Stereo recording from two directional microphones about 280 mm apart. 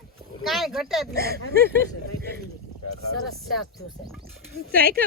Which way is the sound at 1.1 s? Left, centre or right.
Right.